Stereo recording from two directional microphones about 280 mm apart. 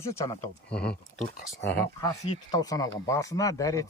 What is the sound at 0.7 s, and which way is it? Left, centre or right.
Speech, left.